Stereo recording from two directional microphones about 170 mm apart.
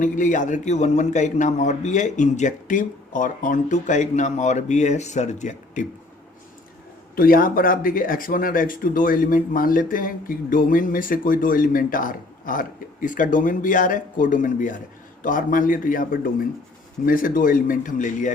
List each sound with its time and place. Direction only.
0.0 s a man's voice: 50° left (ahead or behind)
7.2 s a man's voice: 55° left (ahead or behind)